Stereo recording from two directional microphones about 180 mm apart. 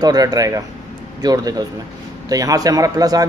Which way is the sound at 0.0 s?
20° right (ahead or behind).